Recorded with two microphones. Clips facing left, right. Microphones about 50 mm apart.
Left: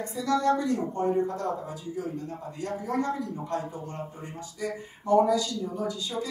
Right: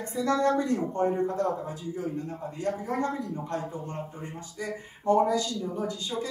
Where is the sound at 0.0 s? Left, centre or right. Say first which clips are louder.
Even; right.